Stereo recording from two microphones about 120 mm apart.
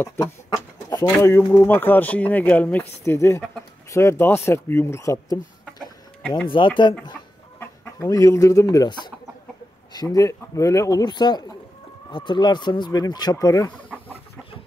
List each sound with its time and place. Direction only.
0.2 s speech: 30° left (ahead or behind)
6.5 s speech: 40° left (ahead or behind)
7.8 s speech: 25° left (ahead or behind)
9.9 s speech: 30° left (ahead or behind)
13.8 s chicken: 15° left (ahead or behind)